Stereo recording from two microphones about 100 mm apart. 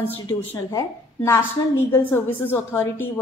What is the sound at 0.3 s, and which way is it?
A woman's voice, 35° left (ahead or behind).